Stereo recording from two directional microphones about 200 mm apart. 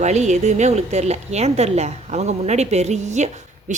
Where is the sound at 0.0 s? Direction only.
35° right (ahead or behind).